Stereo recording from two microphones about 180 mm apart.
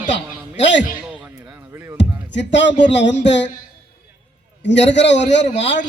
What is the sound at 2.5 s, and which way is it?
A man's voice, 85° left.